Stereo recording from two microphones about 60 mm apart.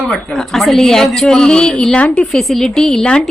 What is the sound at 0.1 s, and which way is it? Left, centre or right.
A woman's voice, centre.